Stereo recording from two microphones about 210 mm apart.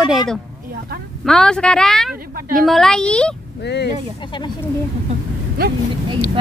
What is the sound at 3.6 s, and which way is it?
Speech, 55° left (ahead or behind).